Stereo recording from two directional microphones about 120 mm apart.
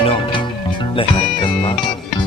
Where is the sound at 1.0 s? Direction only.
45° left (ahead or behind).